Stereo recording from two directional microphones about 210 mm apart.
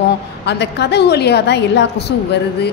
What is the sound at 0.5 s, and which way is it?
A woman's voice, 55° left (ahead or behind).